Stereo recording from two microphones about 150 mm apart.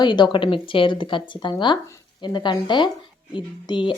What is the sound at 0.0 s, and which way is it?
A woman's voice, 30° left (ahead or behind).